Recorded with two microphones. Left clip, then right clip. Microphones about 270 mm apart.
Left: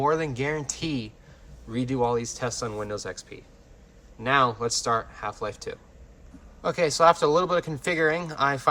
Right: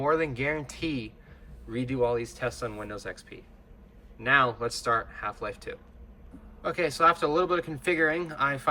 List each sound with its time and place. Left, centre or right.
0.0 s speech: centre